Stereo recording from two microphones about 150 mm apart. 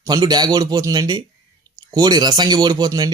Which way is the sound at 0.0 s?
25° right (ahead or behind).